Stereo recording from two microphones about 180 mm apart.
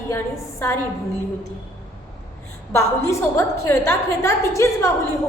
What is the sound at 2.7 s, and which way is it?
A woman's voice, 15° left (ahead or behind).